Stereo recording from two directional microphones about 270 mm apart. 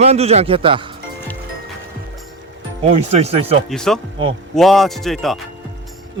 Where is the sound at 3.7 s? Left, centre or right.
Centre.